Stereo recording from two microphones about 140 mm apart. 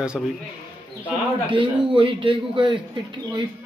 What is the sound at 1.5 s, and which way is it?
A man's voice, 35° right (ahead or behind).